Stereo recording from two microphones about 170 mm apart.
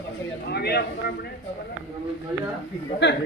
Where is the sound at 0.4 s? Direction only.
70° left (ahead or behind).